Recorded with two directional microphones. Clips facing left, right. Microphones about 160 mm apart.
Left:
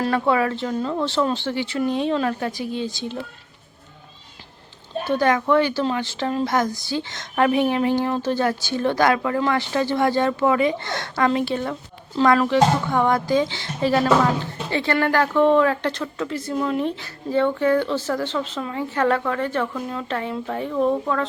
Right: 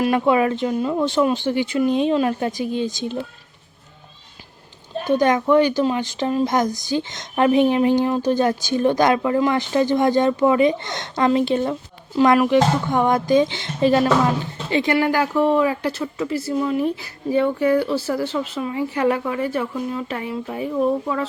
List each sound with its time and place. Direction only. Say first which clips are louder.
0.0 s speech: right 3 dB; 15° right (ahead or behind)
5.0 s speech: right 2 dB; 15° right (ahead or behind)